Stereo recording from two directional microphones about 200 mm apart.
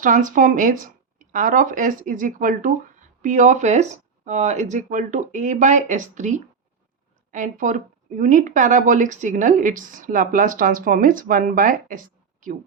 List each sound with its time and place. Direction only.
0.0 s speech: 40° right (ahead or behind)